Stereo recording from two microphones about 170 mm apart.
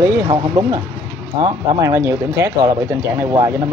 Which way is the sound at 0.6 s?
15° right (ahead or behind).